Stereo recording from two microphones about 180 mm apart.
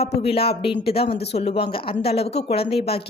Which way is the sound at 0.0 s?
35° left (ahead or behind).